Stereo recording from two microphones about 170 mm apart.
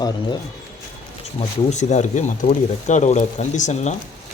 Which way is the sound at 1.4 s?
45° left (ahead or behind).